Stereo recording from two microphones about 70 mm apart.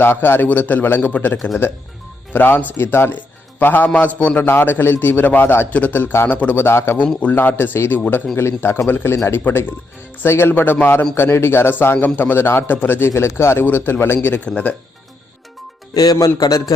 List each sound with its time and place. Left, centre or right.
0.0 s a man's voice: left
6.7 s a man's voice: left
7.2 s a man's voice: left
13.1 s a man's voice: left
16.0 s a man's voice: left